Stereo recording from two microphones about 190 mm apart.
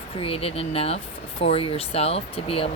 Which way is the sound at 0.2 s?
30° left (ahead or behind).